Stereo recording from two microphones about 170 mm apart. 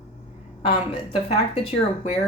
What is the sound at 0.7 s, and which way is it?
A woman's voice, 35° left (ahead or behind).